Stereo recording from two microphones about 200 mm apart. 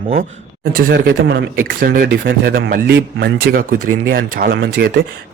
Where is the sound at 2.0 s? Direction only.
55° right (ahead or behind).